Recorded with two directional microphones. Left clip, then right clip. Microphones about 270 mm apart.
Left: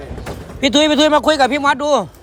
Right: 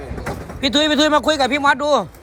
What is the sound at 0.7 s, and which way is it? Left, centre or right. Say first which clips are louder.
Speech: left 3 dB; left.